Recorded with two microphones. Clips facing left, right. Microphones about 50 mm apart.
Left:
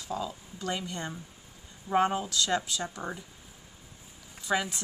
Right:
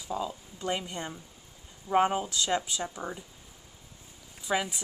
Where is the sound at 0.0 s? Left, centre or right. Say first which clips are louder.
Right 1 dB; centre.